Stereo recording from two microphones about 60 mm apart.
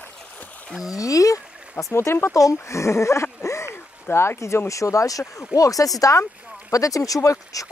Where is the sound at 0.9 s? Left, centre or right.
Left.